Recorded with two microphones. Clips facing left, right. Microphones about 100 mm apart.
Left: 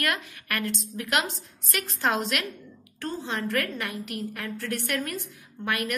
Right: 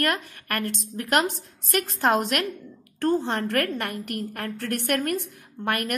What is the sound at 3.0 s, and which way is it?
A woman's voice, 60° right (ahead or behind).